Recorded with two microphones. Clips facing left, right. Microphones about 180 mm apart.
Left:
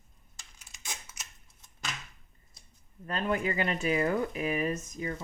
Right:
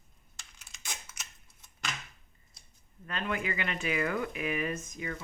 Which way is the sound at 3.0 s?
40° left (ahead or behind).